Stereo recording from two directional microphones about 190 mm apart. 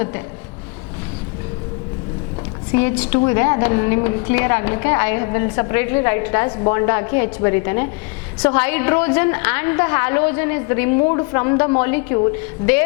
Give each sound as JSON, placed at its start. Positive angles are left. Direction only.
{"t": 2.7, "sound": "a woman's voice", "side_deg": 10}